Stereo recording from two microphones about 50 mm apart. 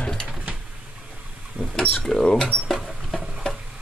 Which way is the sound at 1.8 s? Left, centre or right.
Centre.